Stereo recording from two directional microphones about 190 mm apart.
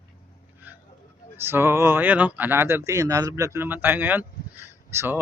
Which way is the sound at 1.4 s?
10° right (ahead or behind).